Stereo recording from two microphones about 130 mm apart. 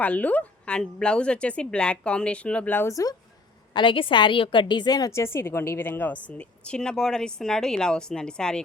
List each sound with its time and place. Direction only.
0.0 s speech: 10° left (ahead or behind)
3.8 s a woman's voice: 40° left (ahead or behind); by 8.6 s 5° left (ahead or behind)